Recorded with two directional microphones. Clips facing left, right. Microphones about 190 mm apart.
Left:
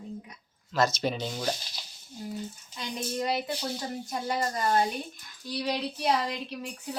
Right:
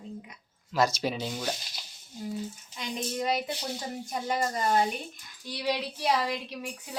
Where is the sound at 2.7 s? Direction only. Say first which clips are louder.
Even; 20° right (ahead or behind).